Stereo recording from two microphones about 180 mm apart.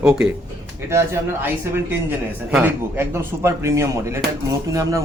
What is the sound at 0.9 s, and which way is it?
Speech, 15° right (ahead or behind).